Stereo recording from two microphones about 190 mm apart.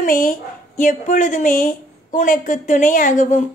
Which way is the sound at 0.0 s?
45° left (ahead or behind).